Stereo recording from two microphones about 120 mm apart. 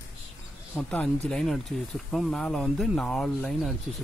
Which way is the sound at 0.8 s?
10° left (ahead or behind).